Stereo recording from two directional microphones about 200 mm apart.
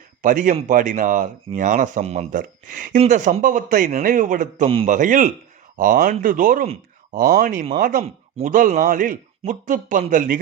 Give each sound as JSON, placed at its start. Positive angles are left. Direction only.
{"t": 0.2, "sound": "a man's voice", "side_deg": -40}